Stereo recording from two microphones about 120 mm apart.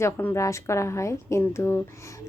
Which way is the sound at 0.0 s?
20° left (ahead or behind).